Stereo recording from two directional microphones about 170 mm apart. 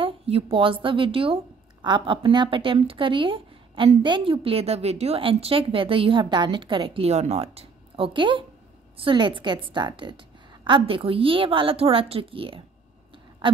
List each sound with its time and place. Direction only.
0.0 s a woman's voice: 35° right (ahead or behind)